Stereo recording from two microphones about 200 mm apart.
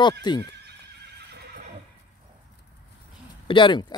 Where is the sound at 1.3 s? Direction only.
45° right (ahead or behind).